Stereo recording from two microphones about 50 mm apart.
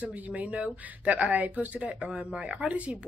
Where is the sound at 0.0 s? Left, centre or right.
Right.